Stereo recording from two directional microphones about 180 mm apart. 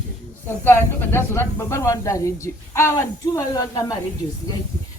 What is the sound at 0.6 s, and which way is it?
Speech, 10° left (ahead or behind).